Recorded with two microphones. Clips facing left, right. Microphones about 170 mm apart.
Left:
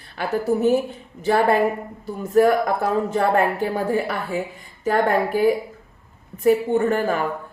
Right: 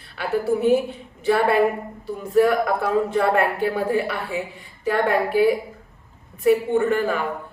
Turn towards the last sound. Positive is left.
turn(degrees=45)  # may be behind; listen again after turning